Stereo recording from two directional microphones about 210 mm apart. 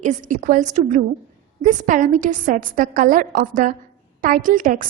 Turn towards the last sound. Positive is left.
turn(degrees=-40)  # may be behind; listen again after turning